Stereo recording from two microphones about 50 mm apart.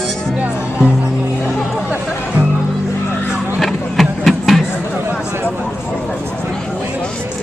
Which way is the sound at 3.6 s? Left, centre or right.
Centre.